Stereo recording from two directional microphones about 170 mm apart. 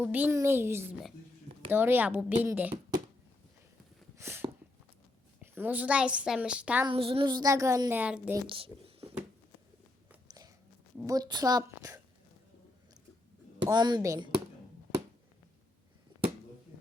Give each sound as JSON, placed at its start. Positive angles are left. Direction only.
{"t": 0.0, "sound": "a woman's voice", "side_deg": -10}
{"t": 4.2, "sound": "a sound", "side_deg": -15}
{"t": 5.4, "sound": "a woman's voice", "side_deg": -10}
{"t": 6.8, "sound": "a child's voice", "side_deg": -35}
{"t": 8.4, "sound": "a sound", "side_deg": -30}
{"t": 10.2, "sound": "biting", "side_deg": -25}
{"t": 11.0, "sound": "a child's voice", "side_deg": -20}
{"t": 13.6, "sound": "a child's voice", "side_deg": -25}